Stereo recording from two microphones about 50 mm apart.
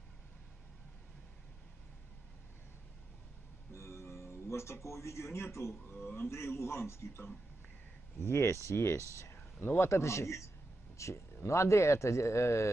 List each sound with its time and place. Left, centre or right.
3.7 s music: left
6.1 s a man's voice: left
9.3 s a sound: left
9.8 s speech: left
11.0 s speech: left
11.4 s speech: left